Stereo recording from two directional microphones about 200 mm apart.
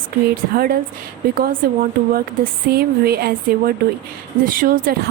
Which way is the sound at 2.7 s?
50° right (ahead or behind).